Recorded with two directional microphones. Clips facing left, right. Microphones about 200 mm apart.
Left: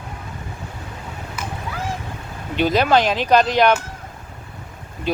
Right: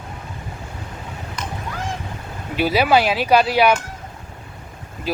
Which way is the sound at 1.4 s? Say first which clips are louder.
Even; 5° left (ahead or behind).